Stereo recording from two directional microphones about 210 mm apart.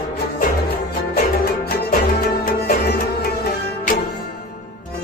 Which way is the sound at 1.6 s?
45° left (ahead or behind).